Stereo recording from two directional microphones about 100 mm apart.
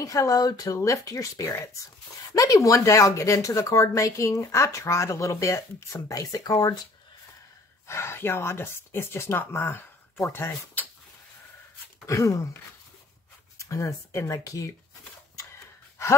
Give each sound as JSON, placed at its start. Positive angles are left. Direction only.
{"t": 0.0, "sound": "speech", "side_deg": 35}
{"t": 7.8, "sound": "speech", "side_deg": 25}
{"t": 12.1, "sound": "speech", "side_deg": 35}
{"t": 13.6, "sound": "speech", "side_deg": 30}